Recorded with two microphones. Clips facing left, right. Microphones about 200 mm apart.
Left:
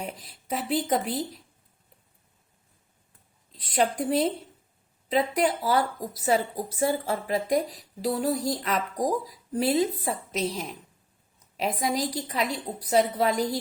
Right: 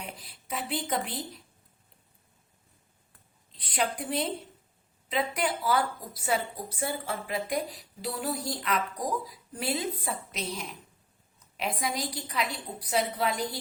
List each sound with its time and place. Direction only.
0.0 s speech: 40° left (ahead or behind)
3.6 s a woman's voice: 40° left (ahead or behind)